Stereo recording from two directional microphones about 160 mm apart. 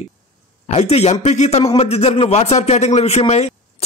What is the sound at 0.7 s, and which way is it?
A man's voice, 40° left (ahead or behind).